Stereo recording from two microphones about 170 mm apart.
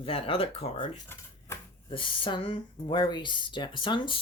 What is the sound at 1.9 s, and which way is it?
Speech, 30° left (ahead or behind).